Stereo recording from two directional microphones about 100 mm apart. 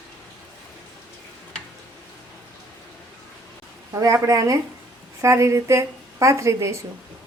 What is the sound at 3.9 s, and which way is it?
A woman's voice, 35° right (ahead or behind).